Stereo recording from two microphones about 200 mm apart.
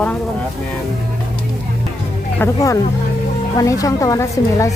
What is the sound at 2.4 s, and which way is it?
Speech, 15° left (ahead or behind).